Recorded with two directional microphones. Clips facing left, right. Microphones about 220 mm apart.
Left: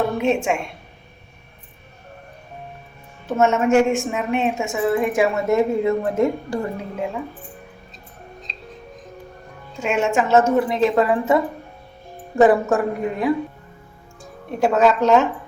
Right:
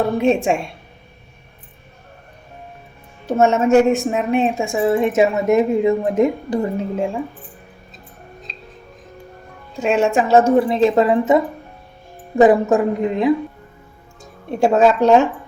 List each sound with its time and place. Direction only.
0.2 s a woman's voice: 30° right (ahead or behind)
3.2 s a woman's voice: 35° right (ahead or behind)
9.8 s a woman's voice: 35° right (ahead or behind)
12.4 s a woman's voice: 20° right (ahead or behind)